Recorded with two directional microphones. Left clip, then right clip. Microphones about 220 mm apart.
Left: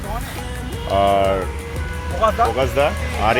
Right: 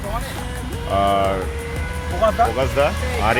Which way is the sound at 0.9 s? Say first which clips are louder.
Left 2 dB; 15° left (ahead or behind).